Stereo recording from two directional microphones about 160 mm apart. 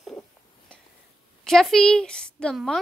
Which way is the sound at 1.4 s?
Centre (ahead or behind).